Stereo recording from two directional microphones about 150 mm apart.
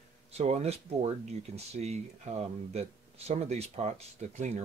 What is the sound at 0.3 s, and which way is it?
Speech, 45° right (ahead or behind).